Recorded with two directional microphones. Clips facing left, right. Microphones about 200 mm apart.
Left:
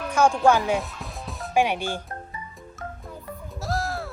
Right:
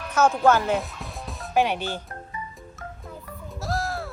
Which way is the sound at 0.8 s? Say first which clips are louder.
Even; centre (ahead or behind).